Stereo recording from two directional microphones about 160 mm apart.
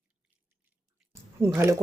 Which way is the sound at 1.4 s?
15° right (ahead or behind).